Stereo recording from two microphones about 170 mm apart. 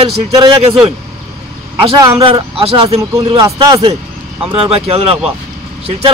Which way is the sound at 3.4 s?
20° right (ahead or behind).